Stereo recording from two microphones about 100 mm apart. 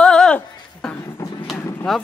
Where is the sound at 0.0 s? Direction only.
5° left (ahead or behind).